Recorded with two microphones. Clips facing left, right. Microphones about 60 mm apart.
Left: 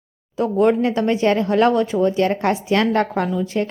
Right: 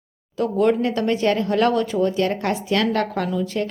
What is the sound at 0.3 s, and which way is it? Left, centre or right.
Speech, centre.